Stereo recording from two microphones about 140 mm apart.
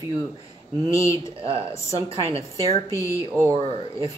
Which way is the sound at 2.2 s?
20° left (ahead or behind).